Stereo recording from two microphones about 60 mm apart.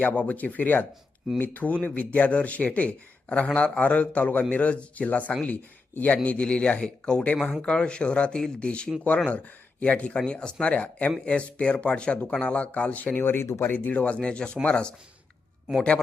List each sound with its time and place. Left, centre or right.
0.0 s a man's voice: left
13.1 s speech: left; by 14.9 s centre